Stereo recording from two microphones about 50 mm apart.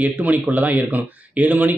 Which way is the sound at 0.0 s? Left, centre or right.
Right.